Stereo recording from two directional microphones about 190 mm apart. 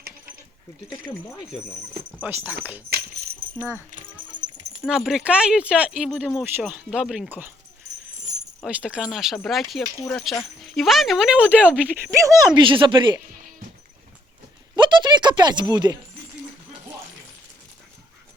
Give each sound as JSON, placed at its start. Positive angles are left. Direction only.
{"t": 2.2, "sound": "speech", "side_deg": -10}
{"t": 3.9, "sound": "a sound", "side_deg": -45}
{"t": 4.8, "sound": "speech", "side_deg": -5}
{"t": 8.6, "sound": "speech", "side_deg": -5}
{"t": 12.6, "sound": "speech", "side_deg": -25}
{"t": 14.8, "sound": "speech", "side_deg": -25}